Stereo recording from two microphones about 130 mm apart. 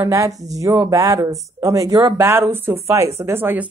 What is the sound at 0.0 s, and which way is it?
A woman's voice, 25° right (ahead or behind).